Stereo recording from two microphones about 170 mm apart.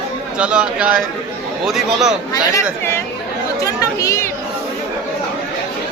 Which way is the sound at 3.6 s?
20° left (ahead or behind).